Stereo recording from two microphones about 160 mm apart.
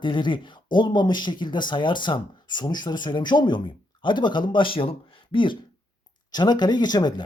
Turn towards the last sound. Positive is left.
turn(degrees=25)  # may be behind; listen again after turning